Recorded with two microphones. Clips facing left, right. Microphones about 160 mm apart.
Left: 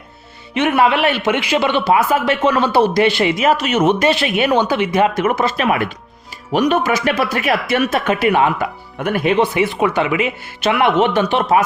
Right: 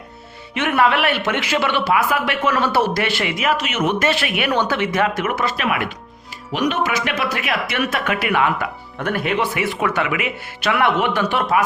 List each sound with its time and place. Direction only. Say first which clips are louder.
0.5 s a man's voice: left 3 dB; 20° left (ahead or behind)
4.0 s speech: left 4 dB; 20° left (ahead or behind)
5.1 s speech: left 5 dB; 30° left (ahead or behind)
9.0 s speech: left 5 dB; 15° left (ahead or behind)
9.3 s a man's voice: left 5 dB; 25° left (ahead or behind)